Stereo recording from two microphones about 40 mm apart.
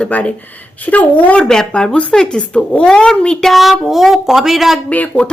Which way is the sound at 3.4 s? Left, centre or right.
Centre.